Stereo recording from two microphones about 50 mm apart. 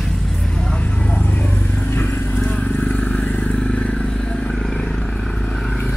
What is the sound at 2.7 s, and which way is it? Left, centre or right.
Vehicle, left.